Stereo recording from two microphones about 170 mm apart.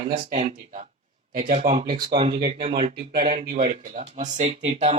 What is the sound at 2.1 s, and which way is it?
Speech, 35° right (ahead or behind).